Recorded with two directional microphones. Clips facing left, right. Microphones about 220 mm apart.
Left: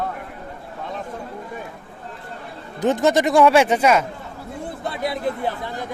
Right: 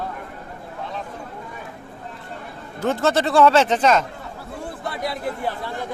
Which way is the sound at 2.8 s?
15° left (ahead or behind).